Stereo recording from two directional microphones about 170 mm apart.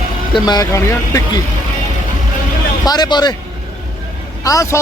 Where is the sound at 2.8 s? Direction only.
25° left (ahead or behind).